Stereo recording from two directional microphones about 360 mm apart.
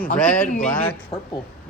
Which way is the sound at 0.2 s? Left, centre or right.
Centre.